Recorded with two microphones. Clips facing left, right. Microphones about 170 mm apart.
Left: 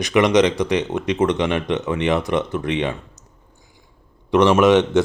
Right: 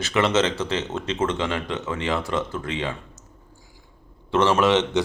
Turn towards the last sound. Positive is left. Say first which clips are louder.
# left 5 dB
turn(degrees=15)  # may be behind; listen again after turning